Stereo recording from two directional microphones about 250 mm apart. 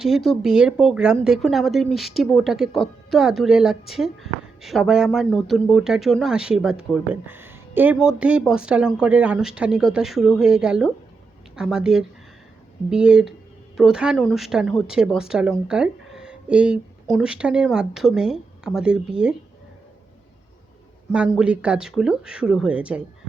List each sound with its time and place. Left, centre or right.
0.0 s speech: centre
21.1 s speech: centre